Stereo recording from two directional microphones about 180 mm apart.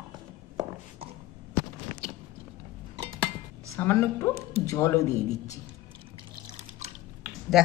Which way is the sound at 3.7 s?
15° left (ahead or behind).